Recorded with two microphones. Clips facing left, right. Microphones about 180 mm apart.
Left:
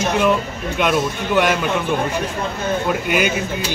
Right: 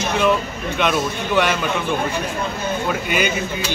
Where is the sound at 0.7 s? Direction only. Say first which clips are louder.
Left 2 dB; 5° left (ahead or behind).